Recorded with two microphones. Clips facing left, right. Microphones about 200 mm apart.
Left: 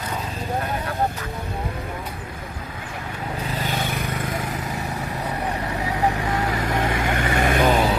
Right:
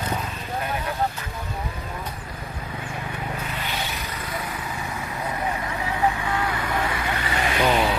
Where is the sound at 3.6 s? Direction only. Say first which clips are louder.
Left 5 dB; 50° left (ahead or behind).